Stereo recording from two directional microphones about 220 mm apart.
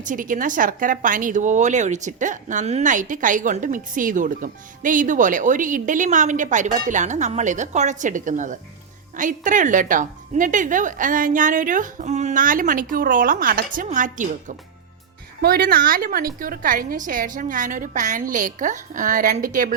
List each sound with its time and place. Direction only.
0.0 s a woman's voice: 35° right (ahead or behind)